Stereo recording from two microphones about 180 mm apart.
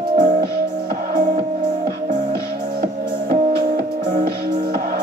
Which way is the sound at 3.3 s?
60° right (ahead or behind).